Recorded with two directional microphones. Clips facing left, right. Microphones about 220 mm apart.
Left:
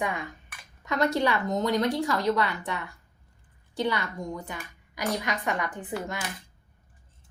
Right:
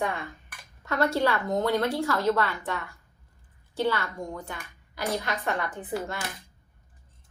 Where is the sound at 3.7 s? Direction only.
15° left (ahead or behind).